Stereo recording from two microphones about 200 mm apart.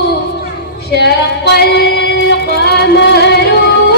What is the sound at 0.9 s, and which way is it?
Female singing, 55° left (ahead or behind).